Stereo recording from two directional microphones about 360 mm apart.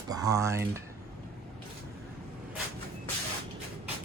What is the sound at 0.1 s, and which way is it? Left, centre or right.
Speech, centre.